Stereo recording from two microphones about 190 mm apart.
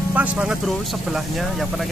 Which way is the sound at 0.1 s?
10° right (ahead or behind).